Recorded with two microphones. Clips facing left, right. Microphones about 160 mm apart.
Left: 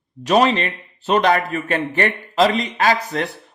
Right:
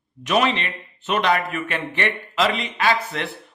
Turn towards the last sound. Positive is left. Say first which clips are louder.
# left 3 dB
turn(degrees=40)  # may be behind; listen again after turning